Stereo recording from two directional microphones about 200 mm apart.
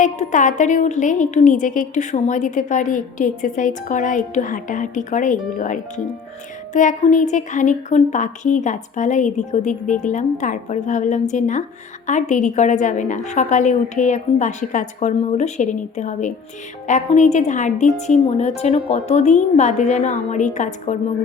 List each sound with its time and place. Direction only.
0.0 s a woman's voice: 40° left (ahead or behind)